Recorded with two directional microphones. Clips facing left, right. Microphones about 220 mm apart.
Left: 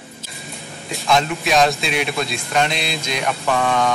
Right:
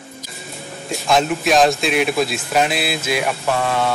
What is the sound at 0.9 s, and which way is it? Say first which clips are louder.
A man's voice: right 2 dB; centre (ahead or behind).